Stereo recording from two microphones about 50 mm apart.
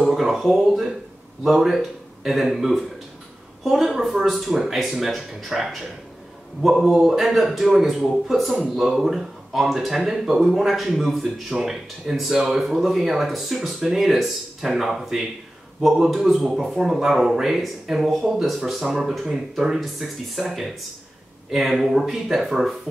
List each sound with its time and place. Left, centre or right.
0.0 s speech: centre